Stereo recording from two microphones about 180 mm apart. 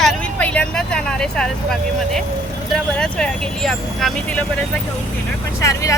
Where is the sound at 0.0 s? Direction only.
5° left (ahead or behind).